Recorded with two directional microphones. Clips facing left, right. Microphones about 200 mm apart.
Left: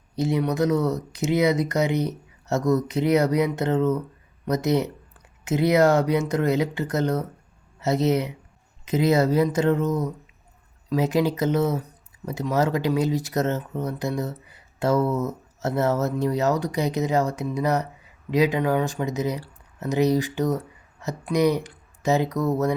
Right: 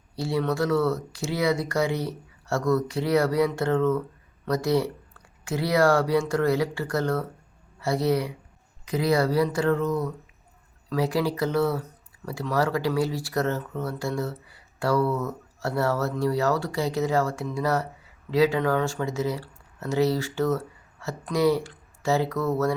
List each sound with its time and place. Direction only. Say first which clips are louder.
0.2 s speech: left 3 dB; 20° left (ahead or behind)